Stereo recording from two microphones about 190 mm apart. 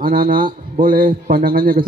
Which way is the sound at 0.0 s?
50° right (ahead or behind).